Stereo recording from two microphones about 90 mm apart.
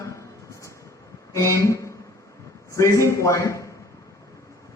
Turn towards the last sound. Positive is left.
turn(degrees=35)  # may be behind; listen again after turning